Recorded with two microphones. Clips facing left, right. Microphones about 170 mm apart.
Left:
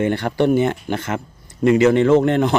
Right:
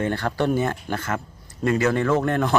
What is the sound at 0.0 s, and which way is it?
Speech, 20° left (ahead or behind).